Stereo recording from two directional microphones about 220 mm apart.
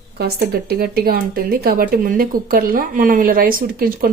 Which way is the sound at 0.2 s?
45° right (ahead or behind).